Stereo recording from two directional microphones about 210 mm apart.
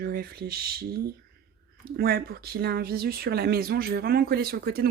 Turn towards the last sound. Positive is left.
turn(degrees=-45)  # may be behind; listen again after turning